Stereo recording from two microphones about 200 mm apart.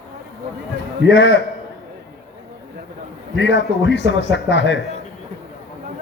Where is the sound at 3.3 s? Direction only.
60° left (ahead or behind).